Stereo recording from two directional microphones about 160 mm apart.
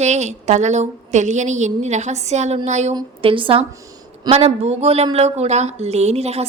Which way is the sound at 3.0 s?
30° right (ahead or behind).